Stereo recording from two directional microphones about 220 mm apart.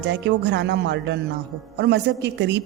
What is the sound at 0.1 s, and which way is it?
A woman's voice, 55° right (ahead or behind).